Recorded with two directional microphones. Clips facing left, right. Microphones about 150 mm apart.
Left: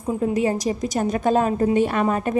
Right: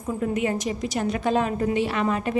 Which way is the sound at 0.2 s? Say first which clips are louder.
Left 3 dB; 35° left (ahead or behind).